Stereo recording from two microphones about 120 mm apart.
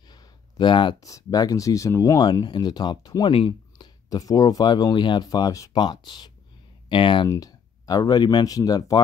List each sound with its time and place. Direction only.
0.1 s a sound: 40° left (ahead or behind)
1.0 s speech: 30° left (ahead or behind); by 7.2 s 45° left (ahead or behind)
7.2 s speech: 30° left (ahead or behind)